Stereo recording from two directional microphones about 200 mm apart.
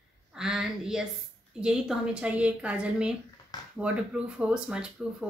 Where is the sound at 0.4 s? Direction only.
5° right (ahead or behind).